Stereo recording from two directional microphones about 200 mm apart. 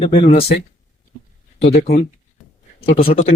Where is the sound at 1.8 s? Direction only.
45° left (ahead or behind).